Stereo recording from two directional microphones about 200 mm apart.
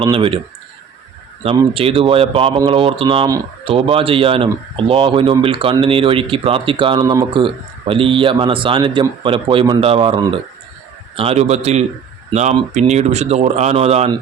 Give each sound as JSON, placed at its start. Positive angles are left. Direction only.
{"t": 0.0, "sound": "speech", "side_deg": -25}
{"t": 1.5, "sound": "speech", "side_deg": -30}